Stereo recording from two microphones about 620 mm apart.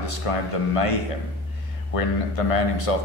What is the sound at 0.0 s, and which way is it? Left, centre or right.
A man's voice, left.